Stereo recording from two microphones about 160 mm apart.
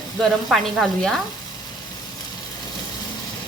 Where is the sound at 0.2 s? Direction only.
Centre (ahead or behind).